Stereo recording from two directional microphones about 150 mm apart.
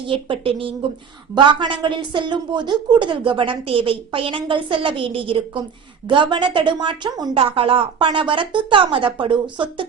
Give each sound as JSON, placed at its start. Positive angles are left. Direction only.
{"t": 0.1, "sound": "a woman's voice", "side_deg": -35}